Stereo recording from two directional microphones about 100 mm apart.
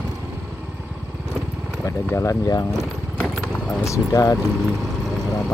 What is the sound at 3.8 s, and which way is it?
Speech, 35° left (ahead or behind).